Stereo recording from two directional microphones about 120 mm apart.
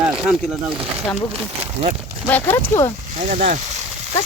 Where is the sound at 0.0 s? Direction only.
5° right (ahead or behind).